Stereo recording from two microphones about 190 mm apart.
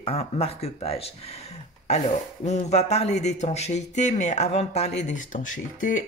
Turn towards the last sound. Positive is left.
turn(degrees=40)  # may be behind; listen again after turning